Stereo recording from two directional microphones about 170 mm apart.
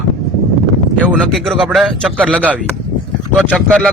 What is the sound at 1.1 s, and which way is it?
Speech, centre (ahead or behind).